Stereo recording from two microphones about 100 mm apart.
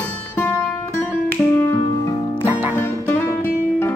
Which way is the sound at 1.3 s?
25° left (ahead or behind).